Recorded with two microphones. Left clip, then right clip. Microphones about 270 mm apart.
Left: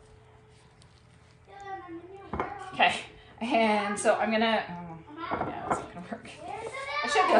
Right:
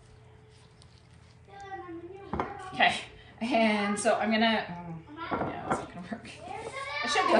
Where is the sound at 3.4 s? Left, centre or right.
Centre.